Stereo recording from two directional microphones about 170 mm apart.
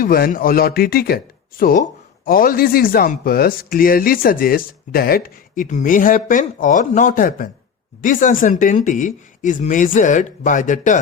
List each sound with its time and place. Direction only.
0.0 s speech: 55° left (ahead or behind)